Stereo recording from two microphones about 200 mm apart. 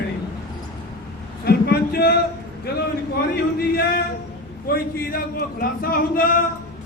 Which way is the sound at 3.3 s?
50° left (ahead or behind).